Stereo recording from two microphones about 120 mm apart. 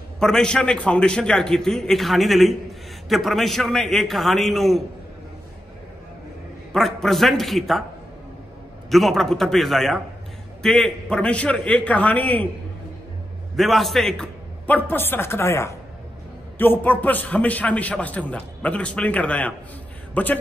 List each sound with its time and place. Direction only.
0.2 s a man's voice: 5° left (ahead or behind)
6.7 s a man's voice: centre (ahead or behind)
8.9 s a man's voice: centre (ahead or behind)
13.6 s a man's voice: centre (ahead or behind)